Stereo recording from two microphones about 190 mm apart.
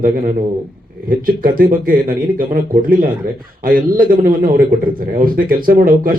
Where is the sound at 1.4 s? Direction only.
50° right (ahead or behind).